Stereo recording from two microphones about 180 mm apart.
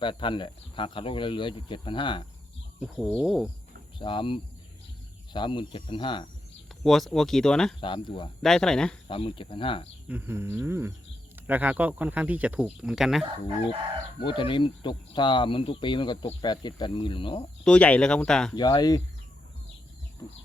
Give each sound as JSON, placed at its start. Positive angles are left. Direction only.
{"t": 0.0, "sound": "speech", "side_deg": 25}
{"t": 2.8, "sound": "speech", "side_deg": 0}
{"t": 3.9, "sound": "speech", "side_deg": 25}
{"t": 6.8, "sound": "speech", "side_deg": 0}
{"t": 7.8, "sound": "speech", "side_deg": 25}
{"t": 8.4, "sound": "speech", "side_deg": 5}
{"t": 9.0, "sound": "speech", "side_deg": 30}
{"t": 10.1, "sound": "speech", "side_deg": -10}
{"t": 14.2, "sound": "speech", "side_deg": 25}
{"t": 17.6, "sound": "speech", "side_deg": 5}
{"t": 18.5, "sound": "speech", "side_deg": 20}